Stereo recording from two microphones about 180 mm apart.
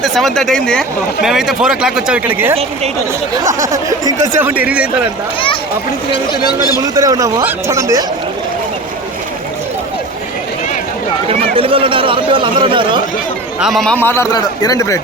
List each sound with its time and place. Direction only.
0.0 s speech: centre (ahead or behind)
6.1 s speech: 25° left (ahead or behind)
6.7 s speech: 20° right (ahead or behind)
11.3 s speech: 30° right (ahead or behind)
13.6 s a man's voice: centre (ahead or behind); by 15.0 s 15° left (ahead or behind)